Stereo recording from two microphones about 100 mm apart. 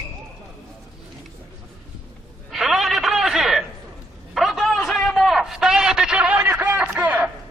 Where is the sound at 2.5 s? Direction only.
Centre (ahead or behind).